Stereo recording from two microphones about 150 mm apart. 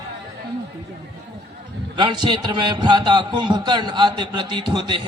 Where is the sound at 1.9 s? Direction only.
30° right (ahead or behind).